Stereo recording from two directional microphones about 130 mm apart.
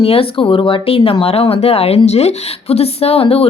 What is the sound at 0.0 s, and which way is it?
Speech, 45° left (ahead or behind).